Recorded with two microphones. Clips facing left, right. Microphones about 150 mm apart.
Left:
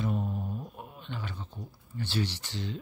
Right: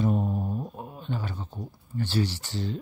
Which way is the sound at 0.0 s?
40° right (ahead or behind).